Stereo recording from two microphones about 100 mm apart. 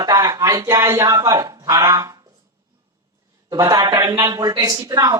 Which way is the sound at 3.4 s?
35° right (ahead or behind).